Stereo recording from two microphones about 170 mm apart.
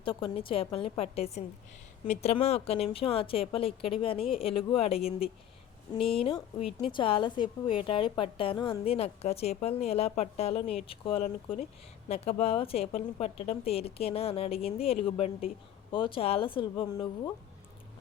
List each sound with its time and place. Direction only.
0.0 s a woman's voice: 30° left (ahead or behind)